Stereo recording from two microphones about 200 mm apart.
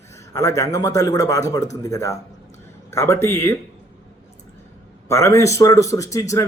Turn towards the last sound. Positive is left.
turn(degrees=15)  # may be behind; listen again after turning